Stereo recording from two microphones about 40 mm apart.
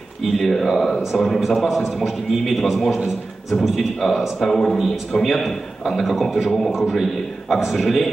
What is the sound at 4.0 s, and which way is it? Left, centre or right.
A man's voice, centre.